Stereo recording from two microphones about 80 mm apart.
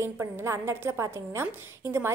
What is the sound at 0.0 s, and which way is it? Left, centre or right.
A woman's voice, right.